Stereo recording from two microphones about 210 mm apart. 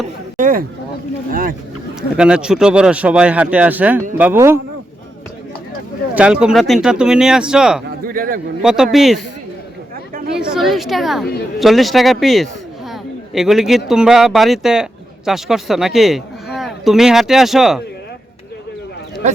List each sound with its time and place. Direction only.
0.3 s speech: 40° right (ahead or behind)
2.0 s a man's voice: 5° right (ahead or behind)
6.1 s a man's voice: 5° right (ahead or behind)
8.0 s a man's voice: 45° right (ahead or behind)
8.6 s a man's voice: 5° right (ahead or behind)
10.3 s a man's voice: centre (ahead or behind)